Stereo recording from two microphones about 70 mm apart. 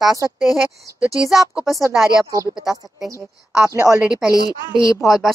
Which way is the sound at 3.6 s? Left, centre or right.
Right.